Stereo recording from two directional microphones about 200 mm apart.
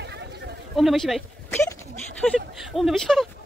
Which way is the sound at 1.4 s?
10° left (ahead or behind).